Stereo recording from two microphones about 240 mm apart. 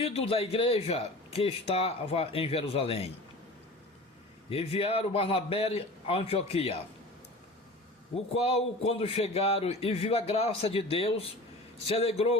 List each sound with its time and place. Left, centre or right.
0.0 s a man's voice: left
4.4 s a man's voice: left
8.1 s a man's voice: left